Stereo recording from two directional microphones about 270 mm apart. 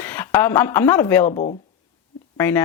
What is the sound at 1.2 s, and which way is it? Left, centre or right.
Speech, left.